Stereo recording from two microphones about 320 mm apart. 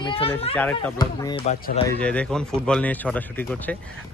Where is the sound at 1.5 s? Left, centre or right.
Left.